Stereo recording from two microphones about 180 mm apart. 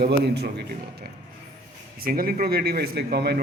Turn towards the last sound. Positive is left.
turn(degrees=-65)  # may be behind; listen again after turning